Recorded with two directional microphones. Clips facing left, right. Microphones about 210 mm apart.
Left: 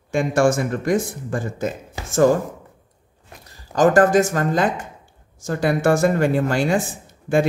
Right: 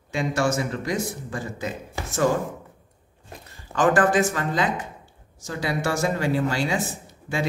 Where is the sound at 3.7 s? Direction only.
40° left (ahead or behind).